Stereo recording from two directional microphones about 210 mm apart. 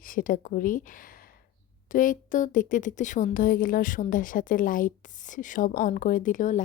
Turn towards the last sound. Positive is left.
turn(degrees=40)  # may be behind; listen again after turning